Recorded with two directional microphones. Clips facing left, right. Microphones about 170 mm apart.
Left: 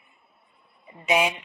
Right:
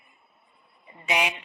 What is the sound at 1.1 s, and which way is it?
Speech, 25° left (ahead or behind).